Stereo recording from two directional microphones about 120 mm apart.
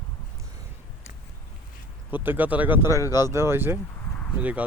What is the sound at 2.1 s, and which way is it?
Speech, 15° right (ahead or behind).